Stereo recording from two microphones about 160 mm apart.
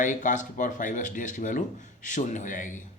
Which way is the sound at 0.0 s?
55° left (ahead or behind).